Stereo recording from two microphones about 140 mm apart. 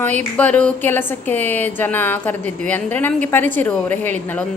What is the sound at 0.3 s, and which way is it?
A woman's voice, 10° left (ahead or behind).